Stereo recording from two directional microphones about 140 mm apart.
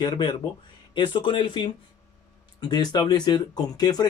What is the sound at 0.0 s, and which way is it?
Speech, 30° left (ahead or behind).